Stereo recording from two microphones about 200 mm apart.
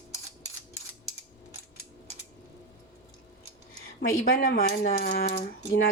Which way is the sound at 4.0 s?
45° left (ahead or behind).